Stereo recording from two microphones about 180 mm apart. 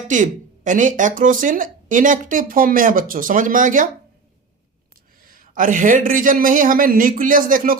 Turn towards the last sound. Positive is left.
turn(degrees=-50)  # may be behind; listen again after turning